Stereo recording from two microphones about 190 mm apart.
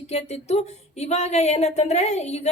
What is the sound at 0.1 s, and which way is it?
Speech, 35° left (ahead or behind).